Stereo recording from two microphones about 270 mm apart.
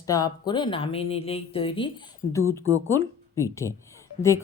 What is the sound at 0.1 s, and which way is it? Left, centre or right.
Speech, centre.